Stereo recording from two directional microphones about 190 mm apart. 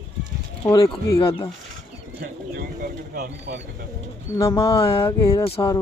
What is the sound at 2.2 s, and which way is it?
Speech, 50° right (ahead or behind).